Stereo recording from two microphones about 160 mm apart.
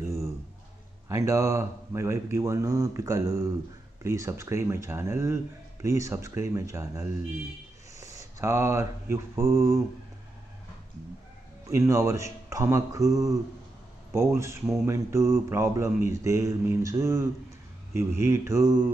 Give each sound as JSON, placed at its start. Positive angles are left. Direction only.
{"t": 1.0, "sound": "speech", "side_deg": -20}
{"t": 8.0, "sound": "mantra", "side_deg": -20}
{"t": 11.6, "sound": "speech", "side_deg": -20}